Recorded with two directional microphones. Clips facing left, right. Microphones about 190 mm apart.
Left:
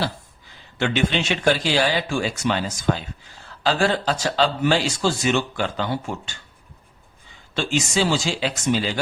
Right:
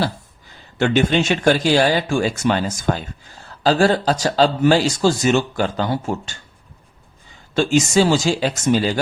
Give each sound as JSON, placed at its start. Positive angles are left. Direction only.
{"t": 0.8, "sound": "speech", "side_deg": -45}
{"t": 7.5, "sound": "speech", "side_deg": -45}